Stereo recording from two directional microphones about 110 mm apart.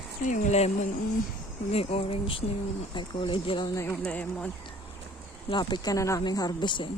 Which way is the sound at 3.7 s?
25° left (ahead or behind).